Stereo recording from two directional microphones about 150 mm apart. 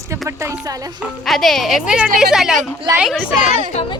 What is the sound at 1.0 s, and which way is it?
Speech, centre (ahead or behind).